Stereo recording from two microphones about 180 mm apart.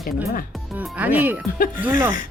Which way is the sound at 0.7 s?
10° right (ahead or behind).